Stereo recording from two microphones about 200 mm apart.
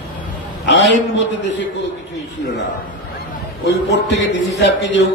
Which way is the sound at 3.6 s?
60° left (ahead or behind).